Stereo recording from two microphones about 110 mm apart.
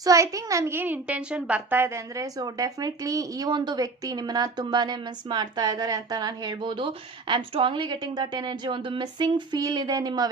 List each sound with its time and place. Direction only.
0.0 s a child's voice: 30° right (ahead or behind)